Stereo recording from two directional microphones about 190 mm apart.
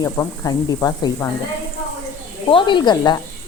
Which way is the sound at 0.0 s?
20° left (ahead or behind).